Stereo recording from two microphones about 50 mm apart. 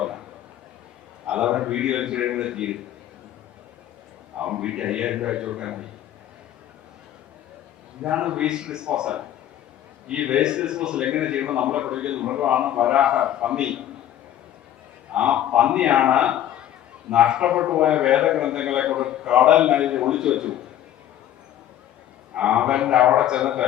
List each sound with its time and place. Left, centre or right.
1.3 s a man's voice: right
4.4 s a man's voice: right
8.0 s a man's voice: right
15.1 s a man's voice: right
22.4 s a man's voice: right